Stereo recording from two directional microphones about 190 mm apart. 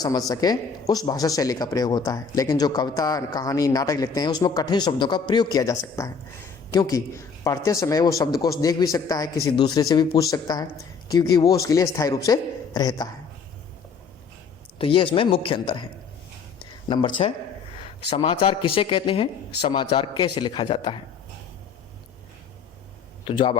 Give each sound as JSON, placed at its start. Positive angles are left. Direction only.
{"t": 0.0, "sound": "a man's voice", "side_deg": 20}
{"t": 14.8, "sound": "speech", "side_deg": 30}
{"t": 16.9, "sound": "speech", "side_deg": 25}
{"t": 18.1, "sound": "speech", "side_deg": 30}
{"t": 23.2, "sound": "speech", "side_deg": 25}